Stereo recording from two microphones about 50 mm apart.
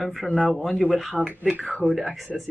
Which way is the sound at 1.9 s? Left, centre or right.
Centre.